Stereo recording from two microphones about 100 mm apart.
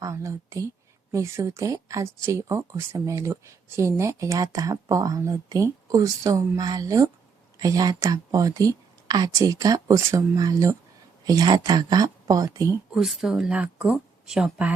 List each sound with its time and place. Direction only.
0.0 s speech: 30° right (ahead or behind)
12.9 s a woman's voice: 5° right (ahead or behind)